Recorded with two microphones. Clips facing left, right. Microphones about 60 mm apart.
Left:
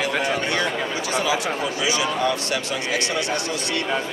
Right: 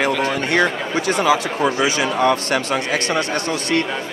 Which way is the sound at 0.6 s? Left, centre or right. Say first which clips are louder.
Right 5 dB; right.